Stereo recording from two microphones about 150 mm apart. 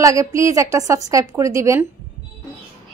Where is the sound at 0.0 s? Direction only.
20° right (ahead or behind).